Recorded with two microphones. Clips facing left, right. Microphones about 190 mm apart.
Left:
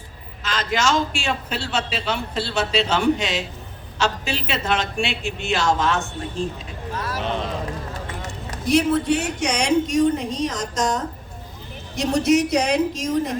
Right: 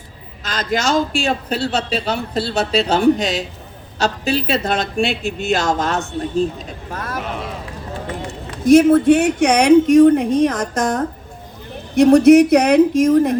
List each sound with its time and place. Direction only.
0.4 s a man's voice: 40° right (ahead or behind)
6.9 s speech: 50° right (ahead or behind)
7.2 s a sound: 30° left (ahead or behind)
8.6 s speech: 45° right (ahead or behind)